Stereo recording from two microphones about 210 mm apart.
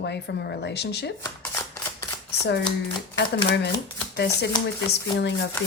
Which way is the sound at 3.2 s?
55° left (ahead or behind).